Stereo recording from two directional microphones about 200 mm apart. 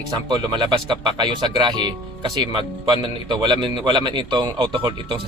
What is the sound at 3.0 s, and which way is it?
A man's voice, 25° right (ahead or behind).